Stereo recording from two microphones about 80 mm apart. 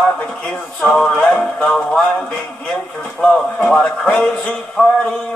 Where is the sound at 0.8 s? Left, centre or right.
Centre.